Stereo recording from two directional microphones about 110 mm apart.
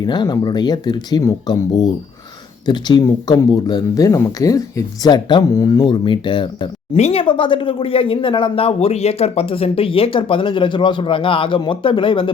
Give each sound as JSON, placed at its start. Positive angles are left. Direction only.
{"t": 0.0, "sound": "speech", "side_deg": 40}
{"t": 2.6, "sound": "speech", "side_deg": 40}
{"t": 6.9, "sound": "speech", "side_deg": 65}